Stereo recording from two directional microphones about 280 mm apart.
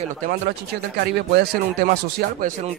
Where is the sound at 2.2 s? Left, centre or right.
Right.